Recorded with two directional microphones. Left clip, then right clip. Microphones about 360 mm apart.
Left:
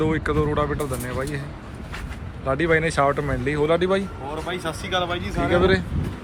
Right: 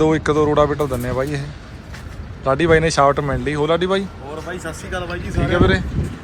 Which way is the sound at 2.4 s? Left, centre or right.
Centre.